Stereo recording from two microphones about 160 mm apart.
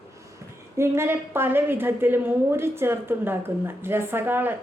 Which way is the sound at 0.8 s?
15° right (ahead or behind).